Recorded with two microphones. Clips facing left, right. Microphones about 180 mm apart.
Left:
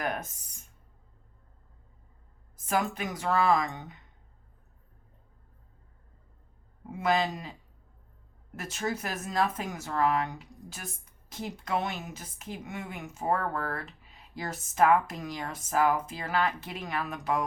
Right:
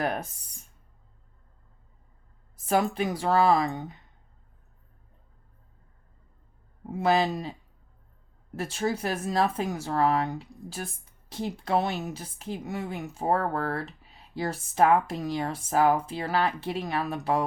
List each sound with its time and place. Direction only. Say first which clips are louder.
2.6 s speech: right 5 dB; 30° right (ahead or behind)
6.8 s speech: right 4 dB; 35° right (ahead or behind)
8.5 s speech: right 5 dB; 30° right (ahead or behind)